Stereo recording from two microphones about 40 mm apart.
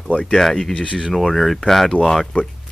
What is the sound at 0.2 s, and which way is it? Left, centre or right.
Speech, centre.